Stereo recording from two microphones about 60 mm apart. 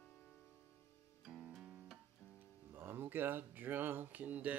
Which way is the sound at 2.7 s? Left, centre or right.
Right.